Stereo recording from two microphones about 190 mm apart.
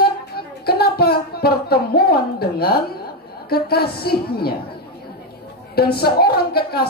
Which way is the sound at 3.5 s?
55° left (ahead or behind).